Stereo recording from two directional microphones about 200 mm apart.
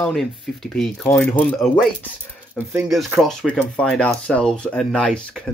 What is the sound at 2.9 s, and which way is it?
A man's voice, centre (ahead or behind).